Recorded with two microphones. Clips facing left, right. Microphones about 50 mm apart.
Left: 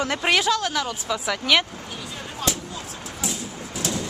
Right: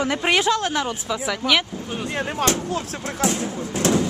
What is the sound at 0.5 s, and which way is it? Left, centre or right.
Speech, right.